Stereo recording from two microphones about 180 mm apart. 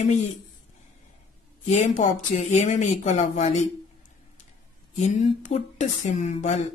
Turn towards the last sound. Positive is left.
turn(degrees=40)  # may be behind; listen again after turning